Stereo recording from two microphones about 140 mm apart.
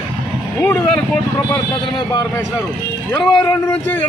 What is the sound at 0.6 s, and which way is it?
Speech, 10° left (ahead or behind).